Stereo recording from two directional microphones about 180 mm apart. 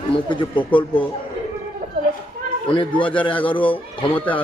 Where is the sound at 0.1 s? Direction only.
25° left (ahead or behind).